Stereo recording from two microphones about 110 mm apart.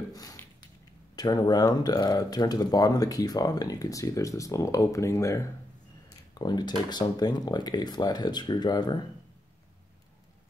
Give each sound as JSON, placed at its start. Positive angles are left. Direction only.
{"t": 0.1, "sound": "a sound", "side_deg": 35}
{"t": 1.1, "sound": "speech", "side_deg": 40}
{"t": 6.3, "sound": "speech", "side_deg": 40}